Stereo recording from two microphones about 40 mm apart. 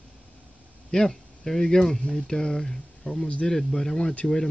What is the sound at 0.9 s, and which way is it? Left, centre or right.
Speech, centre.